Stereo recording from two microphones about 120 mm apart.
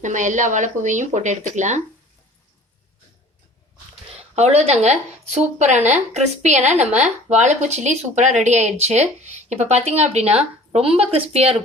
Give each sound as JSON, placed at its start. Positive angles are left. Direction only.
{"t": 0.0, "sound": "speech", "side_deg": -90}
{"t": 4.2, "sound": "speech", "side_deg": -60}